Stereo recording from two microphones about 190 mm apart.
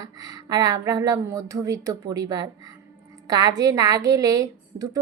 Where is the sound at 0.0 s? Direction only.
20° right (ahead or behind).